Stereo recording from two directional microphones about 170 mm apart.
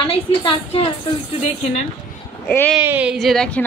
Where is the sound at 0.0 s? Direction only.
30° left (ahead or behind).